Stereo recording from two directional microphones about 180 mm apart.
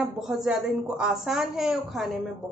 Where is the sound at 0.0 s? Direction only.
Centre (ahead or behind).